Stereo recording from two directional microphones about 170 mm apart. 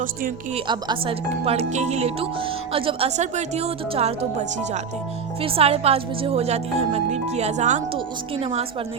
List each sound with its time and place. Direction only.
0.5 s speech: 30° right (ahead or behind); by 7.8 s 45° right (ahead or behind)
7.9 s speech: 30° right (ahead or behind)